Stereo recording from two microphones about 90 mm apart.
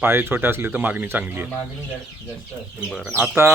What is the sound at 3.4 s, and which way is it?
Speech, 25° right (ahead or behind).